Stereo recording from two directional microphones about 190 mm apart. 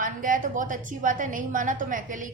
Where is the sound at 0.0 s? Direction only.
45° right (ahead or behind).